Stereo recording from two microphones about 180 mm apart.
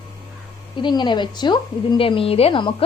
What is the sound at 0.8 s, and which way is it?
A woman's voice, 25° left (ahead or behind).